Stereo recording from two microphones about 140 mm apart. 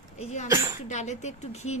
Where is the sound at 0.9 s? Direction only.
55° left (ahead or behind).